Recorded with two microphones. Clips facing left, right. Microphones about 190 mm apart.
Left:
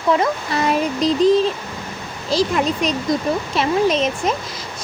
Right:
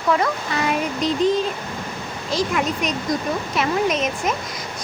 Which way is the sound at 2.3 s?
35° left (ahead or behind).